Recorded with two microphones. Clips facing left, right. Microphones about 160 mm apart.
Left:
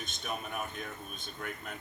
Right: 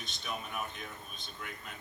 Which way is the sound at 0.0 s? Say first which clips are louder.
Left 2 dB; 50° left (ahead or behind).